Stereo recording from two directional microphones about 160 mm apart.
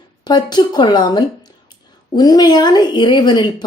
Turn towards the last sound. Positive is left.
turn(degrees=25)  # may be behind; listen again after turning